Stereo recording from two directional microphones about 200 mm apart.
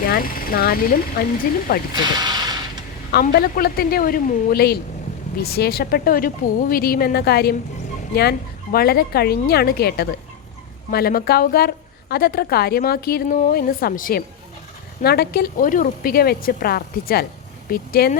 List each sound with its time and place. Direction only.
0.0 s speech: 45° left (ahead or behind)
2.0 s speech: 20° right (ahead or behind)
3.1 s a woman's voice: 50° left (ahead or behind)